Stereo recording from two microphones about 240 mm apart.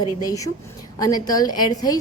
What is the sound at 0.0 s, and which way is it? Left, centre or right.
A woman's voice, centre.